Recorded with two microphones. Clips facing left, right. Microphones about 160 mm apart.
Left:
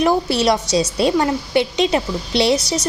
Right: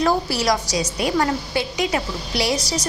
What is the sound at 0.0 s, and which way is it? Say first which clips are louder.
A woman's voice: left 4 dB; 25° left (ahead or behind).